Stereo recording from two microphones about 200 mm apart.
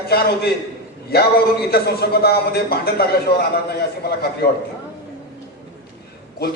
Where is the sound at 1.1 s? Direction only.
50° left (ahead or behind).